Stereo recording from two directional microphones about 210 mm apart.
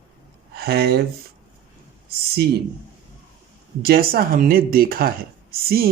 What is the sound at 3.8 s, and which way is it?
Speech, 50° right (ahead or behind).